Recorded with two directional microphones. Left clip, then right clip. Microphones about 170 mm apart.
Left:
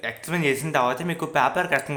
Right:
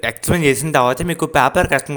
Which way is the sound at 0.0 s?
50° right (ahead or behind).